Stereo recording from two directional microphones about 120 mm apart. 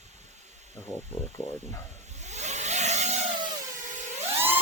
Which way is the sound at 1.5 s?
70° right (ahead or behind).